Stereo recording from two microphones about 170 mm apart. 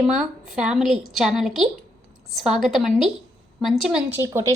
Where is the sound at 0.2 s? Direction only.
5° right (ahead or behind).